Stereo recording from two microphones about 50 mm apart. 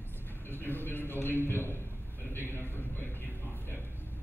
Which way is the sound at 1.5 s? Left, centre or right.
Left.